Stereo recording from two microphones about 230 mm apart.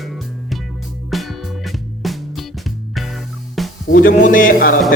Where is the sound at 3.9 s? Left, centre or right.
Left.